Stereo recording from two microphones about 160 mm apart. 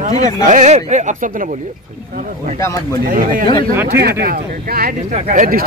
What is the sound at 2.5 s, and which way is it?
Speech, 20° left (ahead or behind).